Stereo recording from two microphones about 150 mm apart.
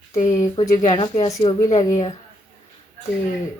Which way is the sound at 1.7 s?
50° left (ahead or behind).